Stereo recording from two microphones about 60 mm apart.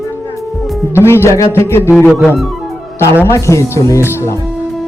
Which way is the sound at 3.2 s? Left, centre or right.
Left.